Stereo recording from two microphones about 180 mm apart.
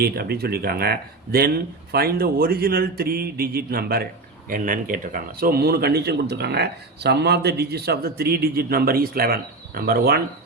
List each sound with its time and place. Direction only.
0.0 s speech: 60° right (ahead or behind)